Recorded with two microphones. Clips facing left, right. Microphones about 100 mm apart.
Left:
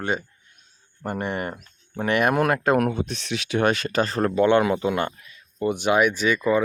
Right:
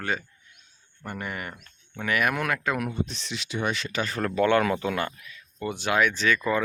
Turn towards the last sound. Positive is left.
turn(degrees=15)  # may be behind; listen again after turning